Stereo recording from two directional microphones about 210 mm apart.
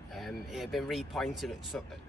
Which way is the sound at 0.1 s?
Centre (ahead or behind).